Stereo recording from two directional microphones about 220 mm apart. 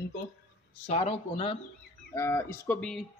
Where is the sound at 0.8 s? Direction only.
30° left (ahead or behind).